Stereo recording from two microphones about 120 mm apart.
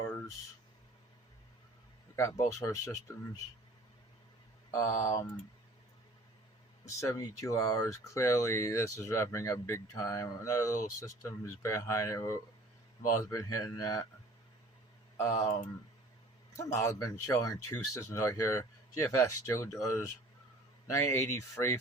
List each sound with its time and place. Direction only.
0.0 s a sound: 25° left (ahead or behind)
2.1 s speech: 25° left (ahead or behind)
4.7 s speech: 25° left (ahead or behind)
6.8 s speech: 25° left (ahead or behind)
15.2 s speech: 25° left (ahead or behind)
16.6 s speech: 30° left (ahead or behind)